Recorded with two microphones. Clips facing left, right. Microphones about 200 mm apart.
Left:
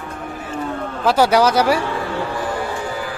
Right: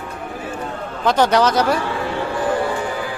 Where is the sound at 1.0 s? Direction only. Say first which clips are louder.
Left 1 dB; 10° left (ahead or behind).